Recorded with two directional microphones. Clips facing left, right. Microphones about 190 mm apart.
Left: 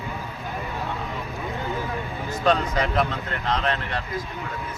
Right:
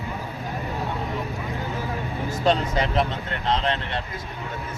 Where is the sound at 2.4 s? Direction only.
25° right (ahead or behind).